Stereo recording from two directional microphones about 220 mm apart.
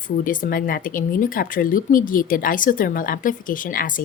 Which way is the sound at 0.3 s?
40° left (ahead or behind).